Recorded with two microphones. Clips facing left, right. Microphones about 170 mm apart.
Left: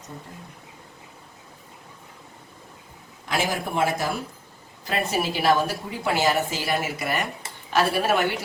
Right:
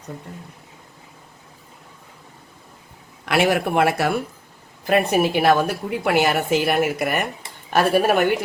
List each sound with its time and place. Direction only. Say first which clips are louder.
3.2 s speech: right 7 dB; 70° right (ahead or behind)
4.9 s a woman's voice: right 8 dB; 55° right (ahead or behind)